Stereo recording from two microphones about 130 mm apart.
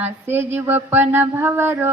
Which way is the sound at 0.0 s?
15° right (ahead or behind).